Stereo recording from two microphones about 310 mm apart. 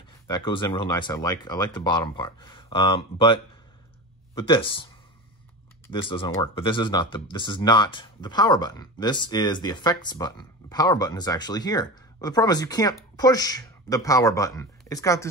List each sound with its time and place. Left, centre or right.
0.3 s speech: centre
4.4 s speech: centre
5.9 s speech: centre